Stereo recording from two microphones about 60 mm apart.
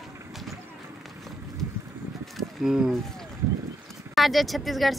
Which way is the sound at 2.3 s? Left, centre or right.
Centre.